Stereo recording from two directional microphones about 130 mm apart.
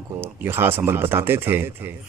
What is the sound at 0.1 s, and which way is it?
Speech, 15° right (ahead or behind).